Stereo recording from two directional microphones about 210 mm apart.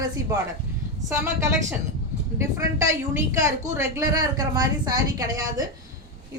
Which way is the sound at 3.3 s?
15° right (ahead or behind).